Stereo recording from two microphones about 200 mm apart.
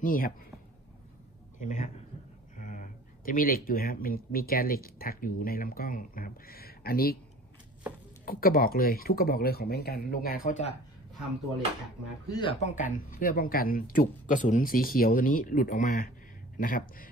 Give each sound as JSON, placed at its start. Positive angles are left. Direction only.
{"t": 0.0, "sound": "speech", "side_deg": 45}
{"t": 1.6, "sound": "a man's voice", "side_deg": 40}
{"t": 8.3, "sound": "speech", "side_deg": 45}
{"t": 12.3, "sound": "speech", "side_deg": 20}
{"t": 12.5, "sound": "speech", "side_deg": 35}